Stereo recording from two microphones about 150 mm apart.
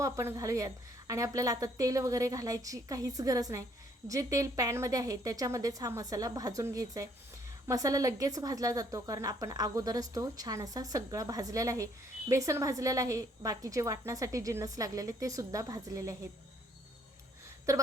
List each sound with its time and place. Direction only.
0.0 s a woman's voice: 20° right (ahead or behind)
17.7 s a woman's voice: 20° right (ahead or behind)